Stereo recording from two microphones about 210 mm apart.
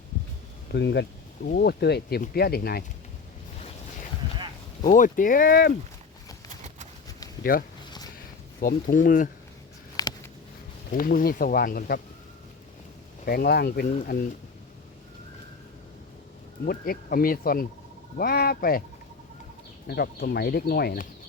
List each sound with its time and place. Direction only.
0.7 s speech: 55° left (ahead or behind)
4.8 s speech: 40° left (ahead or behind)
7.5 s speech: 40° left (ahead or behind)
10.0 s a sound: 15° left (ahead or behind)
10.9 s speech: 40° left (ahead or behind)
13.2 s speech: 45° left (ahead or behind)
16.6 s speech: 45° left (ahead or behind)
19.9 s speech: 50° left (ahead or behind)